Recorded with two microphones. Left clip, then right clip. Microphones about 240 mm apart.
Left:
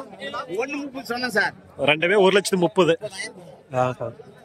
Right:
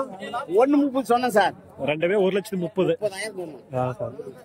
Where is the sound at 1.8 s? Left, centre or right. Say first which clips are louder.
Left 4 dB; centre.